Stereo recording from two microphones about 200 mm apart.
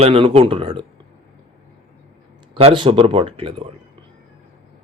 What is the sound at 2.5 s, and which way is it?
Speech, 25° right (ahead or behind).